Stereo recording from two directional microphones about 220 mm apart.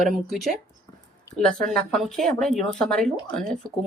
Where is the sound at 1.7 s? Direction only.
5° left (ahead or behind).